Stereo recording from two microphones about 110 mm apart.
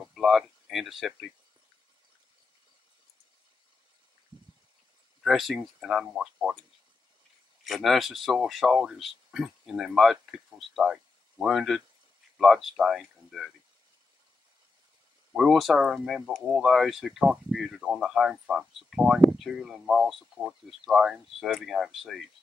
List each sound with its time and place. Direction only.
0.0 s a sound: centre (ahead or behind)
5.2 s speech: centre (ahead or behind)
7.6 s speech: centre (ahead or behind)
15.3 s speech: centre (ahead or behind)